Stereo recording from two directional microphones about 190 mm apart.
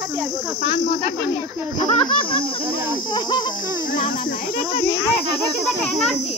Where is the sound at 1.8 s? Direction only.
25° left (ahead or behind).